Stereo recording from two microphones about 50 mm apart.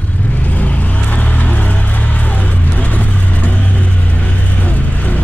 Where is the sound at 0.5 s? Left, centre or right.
Left.